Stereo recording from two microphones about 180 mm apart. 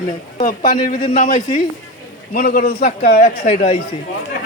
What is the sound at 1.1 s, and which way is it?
A man's voice, 45° left (ahead or behind).